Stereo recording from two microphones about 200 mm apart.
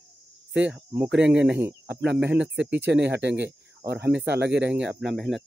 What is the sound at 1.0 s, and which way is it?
Speech, 60° right (ahead or behind).